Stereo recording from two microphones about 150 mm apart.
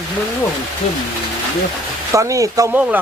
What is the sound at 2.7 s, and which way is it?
Speech, 5° right (ahead or behind).